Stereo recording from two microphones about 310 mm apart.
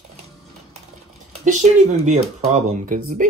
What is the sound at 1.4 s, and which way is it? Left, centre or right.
Speech, right.